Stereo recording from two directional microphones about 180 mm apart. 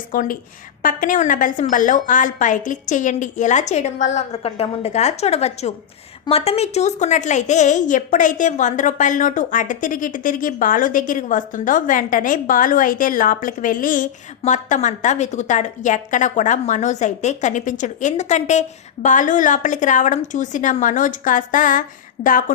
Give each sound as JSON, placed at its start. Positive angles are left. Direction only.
{"t": 0.1, "sound": "a woman's voice", "side_deg": 50}